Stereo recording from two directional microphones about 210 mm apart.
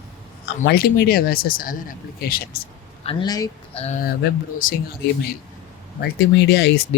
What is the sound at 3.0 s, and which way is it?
Speech, 25° left (ahead or behind).